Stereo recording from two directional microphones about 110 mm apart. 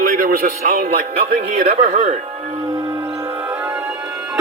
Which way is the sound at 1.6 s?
60° right (ahead or behind).